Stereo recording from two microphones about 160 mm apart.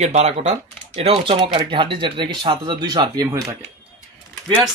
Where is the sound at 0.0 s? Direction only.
45° right (ahead or behind); by 3.5 s 20° right (ahead or behind).